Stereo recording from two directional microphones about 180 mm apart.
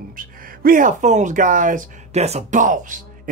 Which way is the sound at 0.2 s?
50° right (ahead or behind).